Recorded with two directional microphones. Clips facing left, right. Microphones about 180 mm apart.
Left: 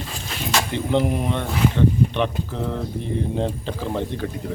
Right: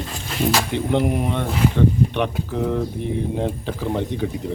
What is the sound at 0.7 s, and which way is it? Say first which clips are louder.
Speech: right 1 dB; 15° right (ahead or behind).